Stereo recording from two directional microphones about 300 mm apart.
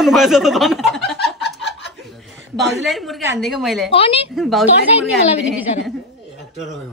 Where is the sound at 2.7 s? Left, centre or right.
Centre.